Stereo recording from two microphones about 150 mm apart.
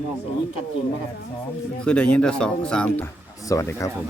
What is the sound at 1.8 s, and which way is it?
Speech, 5° left (ahead or behind).